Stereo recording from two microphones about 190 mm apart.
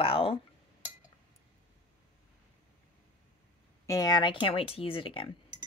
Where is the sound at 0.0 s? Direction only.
30° left (ahead or behind).